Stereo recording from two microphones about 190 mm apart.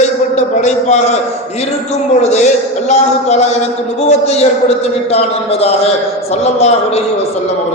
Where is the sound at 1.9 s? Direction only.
35° left (ahead or behind).